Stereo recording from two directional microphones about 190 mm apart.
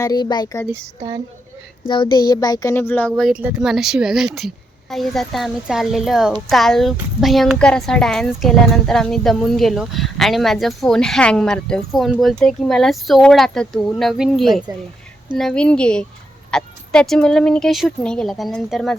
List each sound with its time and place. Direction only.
0.0 s speech: 20° left (ahead or behind)
0.9 s speech: 25° right (ahead or behind)
1.9 s speech: 25° left (ahead or behind)
3.2 s speech: 5° right (ahead or behind)